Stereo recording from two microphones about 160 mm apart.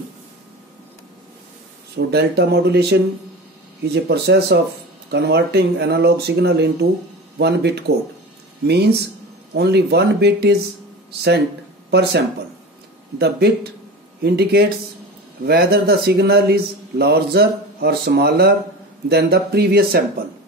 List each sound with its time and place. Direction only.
2.0 s speech: 90° right
14.2 s speech: 80° right
19.0 s speech: 90° right